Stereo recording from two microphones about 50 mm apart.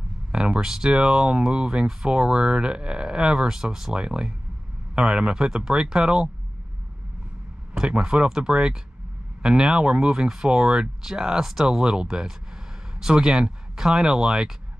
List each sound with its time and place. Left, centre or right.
0.3 s speech: centre
7.7 s speech: centre